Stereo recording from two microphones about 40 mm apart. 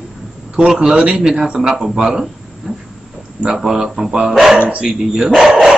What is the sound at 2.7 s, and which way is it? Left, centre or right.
Train, centre.